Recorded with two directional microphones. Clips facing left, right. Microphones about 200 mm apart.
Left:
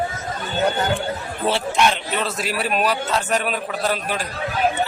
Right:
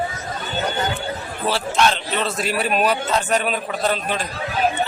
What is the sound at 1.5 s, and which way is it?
Speech, 15° left (ahead or behind).